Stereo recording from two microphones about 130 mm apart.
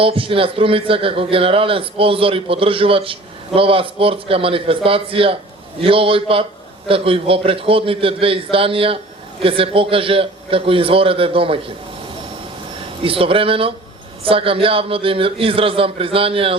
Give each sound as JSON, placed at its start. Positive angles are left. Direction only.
{"t": 0.0, "sound": "a man's voice", "side_deg": -45}
{"t": 13.0, "sound": "a man's voice", "side_deg": -45}